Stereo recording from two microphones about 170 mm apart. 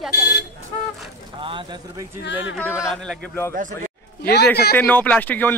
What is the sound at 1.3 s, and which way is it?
Speech, 30° right (ahead or behind).